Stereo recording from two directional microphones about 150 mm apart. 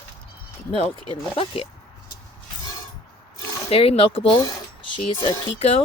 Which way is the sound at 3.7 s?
40° left (ahead or behind).